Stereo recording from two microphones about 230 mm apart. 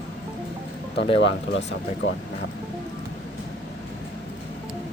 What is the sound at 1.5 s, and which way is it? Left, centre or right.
Speech, left.